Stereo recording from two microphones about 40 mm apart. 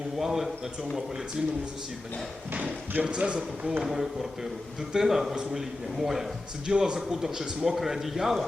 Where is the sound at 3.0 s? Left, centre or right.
Right.